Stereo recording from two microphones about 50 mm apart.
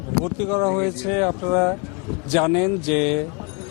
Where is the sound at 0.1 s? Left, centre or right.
Centre.